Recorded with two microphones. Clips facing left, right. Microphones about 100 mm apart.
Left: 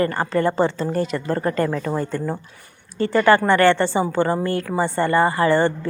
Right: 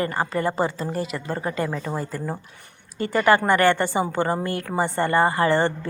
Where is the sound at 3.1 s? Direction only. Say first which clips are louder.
Left 3 dB; 20° right (ahead or behind).